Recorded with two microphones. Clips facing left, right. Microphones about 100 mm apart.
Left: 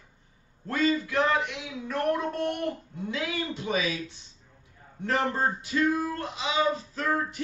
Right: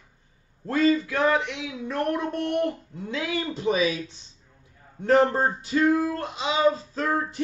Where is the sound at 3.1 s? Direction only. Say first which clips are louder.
Right 3 dB; 30° right (ahead or behind).